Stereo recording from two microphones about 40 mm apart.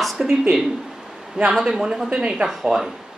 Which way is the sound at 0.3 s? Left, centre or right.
Centre.